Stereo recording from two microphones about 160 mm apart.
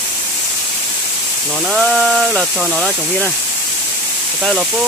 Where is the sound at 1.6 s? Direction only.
Centre (ahead or behind).